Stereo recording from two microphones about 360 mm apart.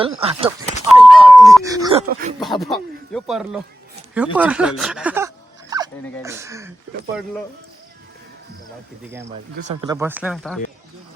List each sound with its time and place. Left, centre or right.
0.2 s speech: centre
0.9 s a sound: centre
1.7 s speech: centre
2.4 s speech: centre
9.3 s speech: centre